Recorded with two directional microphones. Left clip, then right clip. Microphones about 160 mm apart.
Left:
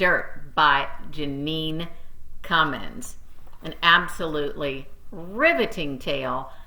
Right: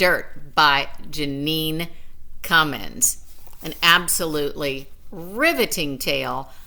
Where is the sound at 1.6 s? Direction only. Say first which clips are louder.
Right 4 dB; 40° right (ahead or behind).